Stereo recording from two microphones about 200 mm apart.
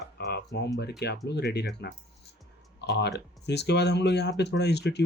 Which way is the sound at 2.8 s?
55° left (ahead or behind).